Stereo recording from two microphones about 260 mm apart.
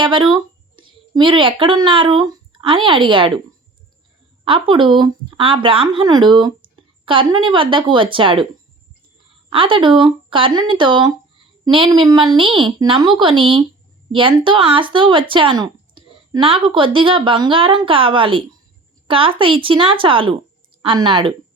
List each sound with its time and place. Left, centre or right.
0.0 s speech: centre
4.4 s a woman's voice: right
9.5 s a woman's voice: centre